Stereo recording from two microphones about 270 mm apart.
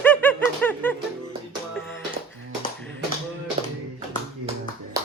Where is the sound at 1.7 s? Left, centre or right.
Centre.